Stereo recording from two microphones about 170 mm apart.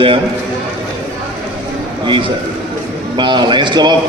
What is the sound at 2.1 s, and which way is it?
A man's voice, 30° right (ahead or behind).